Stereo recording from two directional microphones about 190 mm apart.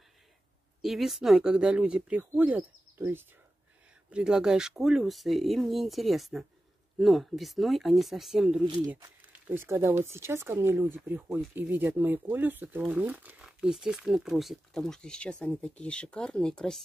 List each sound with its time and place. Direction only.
0.8 s speech: centre (ahead or behind)
8.6 s speech: 25° right (ahead or behind)
9.5 s speech: 10° right (ahead or behind); by 16.8 s 5° left (ahead or behind)